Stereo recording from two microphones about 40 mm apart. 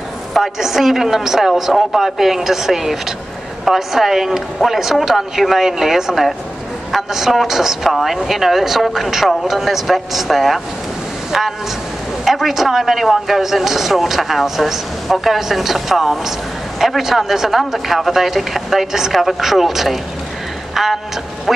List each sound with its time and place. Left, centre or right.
0.3 s speech: centre
20.7 s music: centre
21.5 s speech: centre